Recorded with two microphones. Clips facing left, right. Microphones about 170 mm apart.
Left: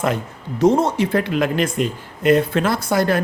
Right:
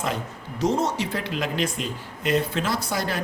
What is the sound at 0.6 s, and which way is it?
Speech, 55° left (ahead or behind).